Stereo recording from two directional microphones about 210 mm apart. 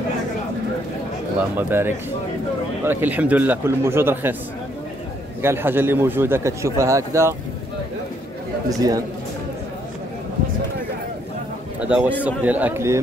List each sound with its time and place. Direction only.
1.6 s a man's voice: 10° right (ahead or behind)
5.4 s a man's voice: 10° right (ahead or behind)
8.6 s a man's voice: 15° right (ahead or behind)
11.9 s a man's voice: 5° right (ahead or behind)